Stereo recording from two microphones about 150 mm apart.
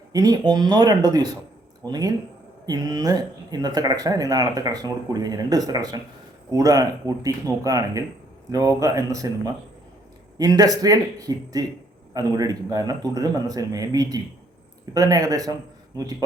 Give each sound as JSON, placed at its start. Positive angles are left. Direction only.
{"t": 0.1, "sound": "speech", "side_deg": -25}